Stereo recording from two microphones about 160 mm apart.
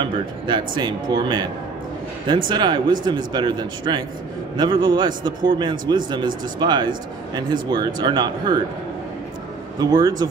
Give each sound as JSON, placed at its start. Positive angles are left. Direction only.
{"t": 0.0, "sound": "a man's voice", "side_deg": -30}
{"t": 9.8, "sound": "a man's voice", "side_deg": -25}